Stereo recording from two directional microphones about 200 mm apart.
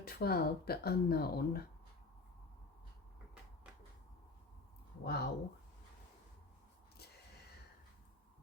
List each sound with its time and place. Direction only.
0.0 s speech: 50° left (ahead or behind)
5.0 s speech: 50° left (ahead or behind)